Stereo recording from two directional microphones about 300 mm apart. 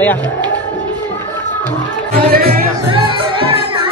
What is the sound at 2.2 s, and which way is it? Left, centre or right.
Speech, right.